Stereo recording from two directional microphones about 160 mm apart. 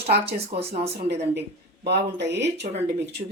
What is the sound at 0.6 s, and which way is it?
Speech, 40° right (ahead or behind).